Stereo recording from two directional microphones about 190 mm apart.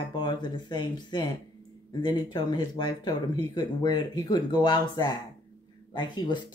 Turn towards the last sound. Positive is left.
turn(degrees=25)  # may be behind; listen again after turning